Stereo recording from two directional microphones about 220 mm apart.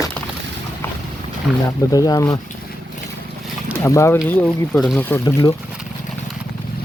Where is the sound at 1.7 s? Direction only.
15° left (ahead or behind).